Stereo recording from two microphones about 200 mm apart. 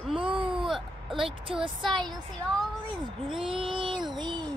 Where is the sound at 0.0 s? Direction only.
5° right (ahead or behind).